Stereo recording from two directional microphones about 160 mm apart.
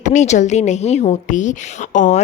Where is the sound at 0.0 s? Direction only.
50° left (ahead or behind).